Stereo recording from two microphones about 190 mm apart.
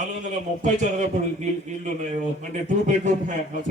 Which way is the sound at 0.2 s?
40° right (ahead or behind).